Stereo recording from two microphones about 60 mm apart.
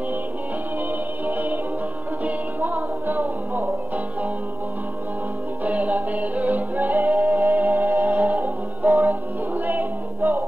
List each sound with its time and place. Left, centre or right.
1.2 s music: right
5.6 s music: right